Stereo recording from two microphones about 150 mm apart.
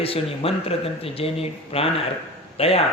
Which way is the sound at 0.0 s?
40° left (ahead or behind).